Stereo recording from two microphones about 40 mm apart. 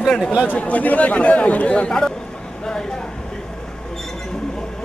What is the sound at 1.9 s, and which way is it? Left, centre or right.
Speech, centre.